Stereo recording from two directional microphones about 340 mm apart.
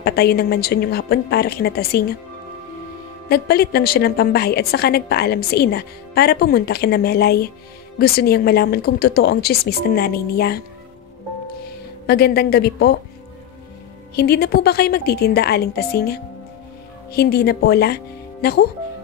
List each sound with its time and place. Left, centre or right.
0.0 s a woman's voice: left
3.3 s a woman's voice: left
12.1 s a woman's voice: left
14.1 s a woman's voice: left